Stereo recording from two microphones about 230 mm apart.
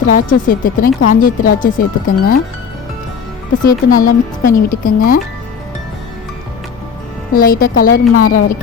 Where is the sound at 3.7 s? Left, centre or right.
Left.